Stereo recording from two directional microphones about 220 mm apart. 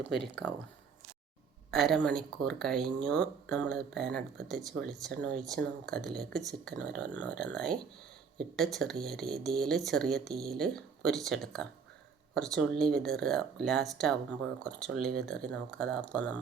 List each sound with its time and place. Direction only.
0.0 s speech: 5° left (ahead or behind)
1.7 s speech: centre (ahead or behind)